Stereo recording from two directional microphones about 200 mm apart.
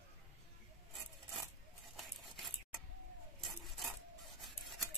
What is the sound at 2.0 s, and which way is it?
Patter, centre (ahead or behind).